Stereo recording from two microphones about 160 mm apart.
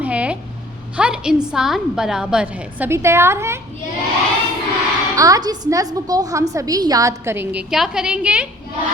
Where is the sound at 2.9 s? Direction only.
15° right (ahead or behind).